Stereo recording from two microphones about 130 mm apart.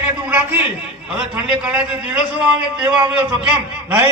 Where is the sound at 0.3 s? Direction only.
15° right (ahead or behind).